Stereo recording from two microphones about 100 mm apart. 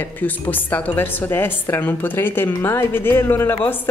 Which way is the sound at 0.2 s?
15° left (ahead or behind).